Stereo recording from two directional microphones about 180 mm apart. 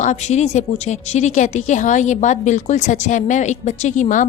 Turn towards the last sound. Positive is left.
turn(degrees=45)  # may be behind; listen again after turning